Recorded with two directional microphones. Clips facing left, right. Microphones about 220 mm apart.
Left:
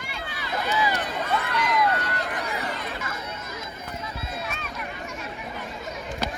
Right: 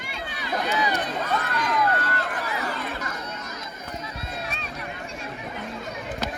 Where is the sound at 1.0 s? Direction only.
15° left (ahead or behind).